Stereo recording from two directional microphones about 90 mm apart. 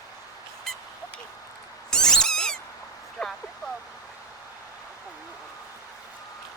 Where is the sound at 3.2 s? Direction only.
10° left (ahead or behind).